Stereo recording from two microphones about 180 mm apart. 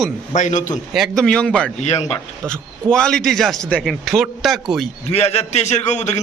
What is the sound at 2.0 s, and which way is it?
Speech, 15° left (ahead or behind).